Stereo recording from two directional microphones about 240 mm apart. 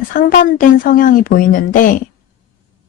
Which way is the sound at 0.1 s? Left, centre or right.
Left.